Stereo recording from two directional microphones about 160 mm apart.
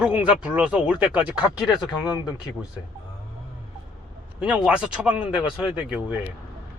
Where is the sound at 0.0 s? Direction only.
10° right (ahead or behind).